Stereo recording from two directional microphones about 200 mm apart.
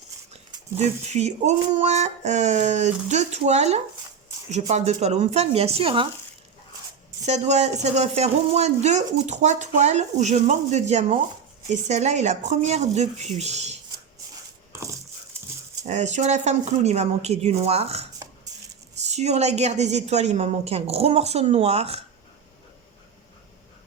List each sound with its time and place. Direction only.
0.8 s speech: 35° right (ahead or behind)
7.3 s speech: 35° right (ahead or behind)
15.8 s speech: 35° right (ahead or behind)